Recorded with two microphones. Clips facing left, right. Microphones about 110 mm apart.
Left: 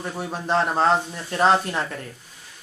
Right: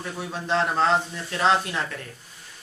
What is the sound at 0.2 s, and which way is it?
Speech, 45° left (ahead or behind).